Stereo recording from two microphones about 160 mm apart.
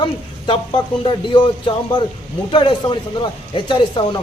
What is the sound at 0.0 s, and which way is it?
A man's voice, 30° left (ahead or behind).